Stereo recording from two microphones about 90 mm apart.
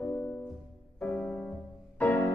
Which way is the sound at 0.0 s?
20° left (ahead or behind).